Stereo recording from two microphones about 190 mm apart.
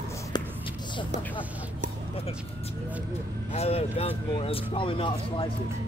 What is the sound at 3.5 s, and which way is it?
Speech, 30° left (ahead or behind).